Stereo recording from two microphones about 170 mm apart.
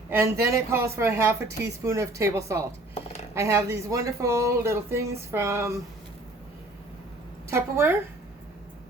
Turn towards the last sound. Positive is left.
turn(degrees=-15)  # may be behind; listen again after turning